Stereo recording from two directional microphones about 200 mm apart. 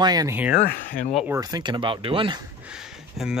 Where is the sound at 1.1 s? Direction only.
10° right (ahead or behind).